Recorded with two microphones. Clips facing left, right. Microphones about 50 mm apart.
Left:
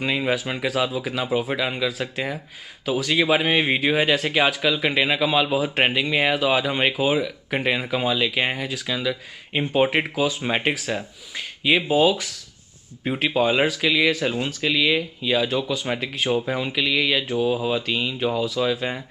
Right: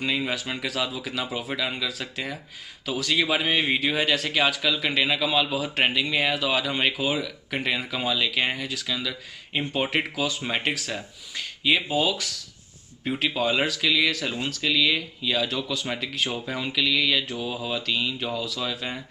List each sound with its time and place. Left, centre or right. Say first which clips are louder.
0.0 s speech: left 4 dB; centre